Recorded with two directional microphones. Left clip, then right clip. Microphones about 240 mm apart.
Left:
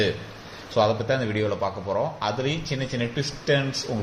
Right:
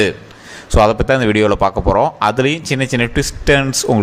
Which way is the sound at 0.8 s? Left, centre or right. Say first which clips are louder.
Right 10 dB; right.